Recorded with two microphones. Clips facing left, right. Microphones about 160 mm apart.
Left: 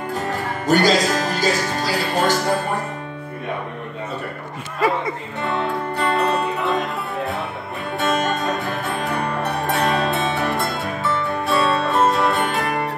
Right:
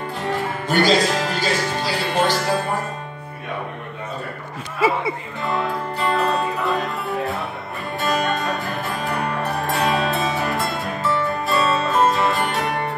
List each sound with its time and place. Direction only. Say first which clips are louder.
0.7 s music: left 1 dB; 45° left (ahead or behind)
4.7 s speech: even; 5° right (ahead or behind)
6.0 s music: even; centre (ahead or behind)